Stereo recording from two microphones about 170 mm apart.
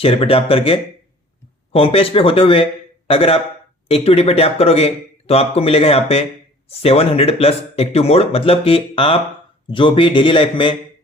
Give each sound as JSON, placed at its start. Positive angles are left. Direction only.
{"t": 0.0, "sound": "a man's voice", "side_deg": 35}